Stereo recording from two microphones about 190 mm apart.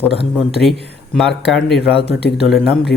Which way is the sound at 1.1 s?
Centre (ahead or behind).